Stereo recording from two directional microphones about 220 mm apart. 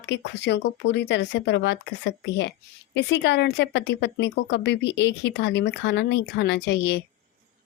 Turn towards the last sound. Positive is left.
turn(degrees=50)  # may be behind; listen again after turning